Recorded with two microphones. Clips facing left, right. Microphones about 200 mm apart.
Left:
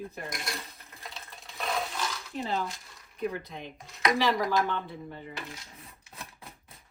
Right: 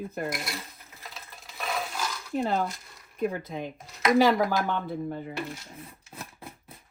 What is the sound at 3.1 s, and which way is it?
Speech, 50° right (ahead or behind).